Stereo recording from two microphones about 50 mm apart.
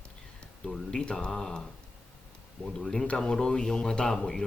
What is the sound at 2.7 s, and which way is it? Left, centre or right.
Speech, centre.